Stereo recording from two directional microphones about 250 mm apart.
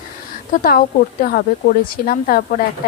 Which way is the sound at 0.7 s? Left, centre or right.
Left.